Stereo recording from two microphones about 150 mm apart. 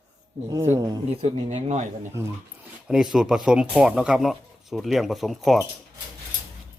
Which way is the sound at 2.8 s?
5° right (ahead or behind).